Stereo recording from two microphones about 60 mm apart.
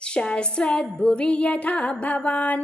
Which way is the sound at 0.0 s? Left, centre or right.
Centre.